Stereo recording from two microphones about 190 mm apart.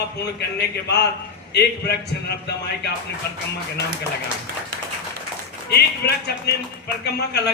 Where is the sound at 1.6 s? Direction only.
60° left (ahead or behind).